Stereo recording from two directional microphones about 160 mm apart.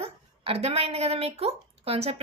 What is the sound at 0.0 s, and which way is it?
Speech, 35° right (ahead or behind).